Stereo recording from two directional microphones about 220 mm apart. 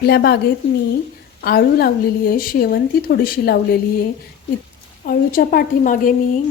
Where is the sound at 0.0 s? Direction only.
45° left (ahead or behind).